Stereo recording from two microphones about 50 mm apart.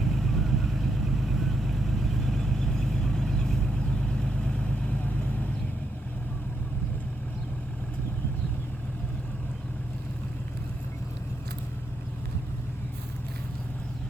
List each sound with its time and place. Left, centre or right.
0.0 s vehicle: centre
5.0 s vehicle: left